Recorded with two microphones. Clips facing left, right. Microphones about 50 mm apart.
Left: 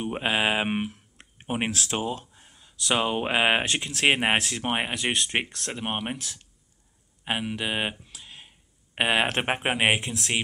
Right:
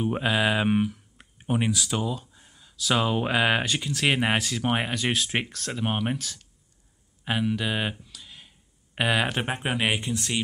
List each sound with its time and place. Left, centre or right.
0.0 s mantra: left
1.5 s speech: centre
1.9 s mantra: left
2.3 s speech: left
4.0 s mantra: left
4.6 s mantra: centre
5.1 s speech: left
5.7 s speech: centre
7.2 s a sound: left
9.6 s mantra: left
9.9 s speech: centre